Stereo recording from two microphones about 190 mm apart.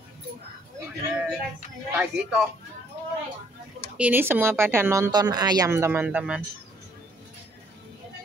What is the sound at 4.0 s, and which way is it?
Speech, 10° right (ahead or behind).